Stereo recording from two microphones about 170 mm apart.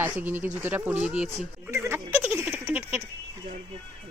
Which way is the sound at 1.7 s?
15° right (ahead or behind).